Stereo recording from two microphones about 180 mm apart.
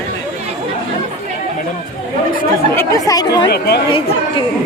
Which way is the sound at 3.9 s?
30° left (ahead or behind).